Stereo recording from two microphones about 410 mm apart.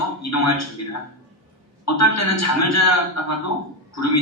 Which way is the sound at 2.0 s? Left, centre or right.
Left.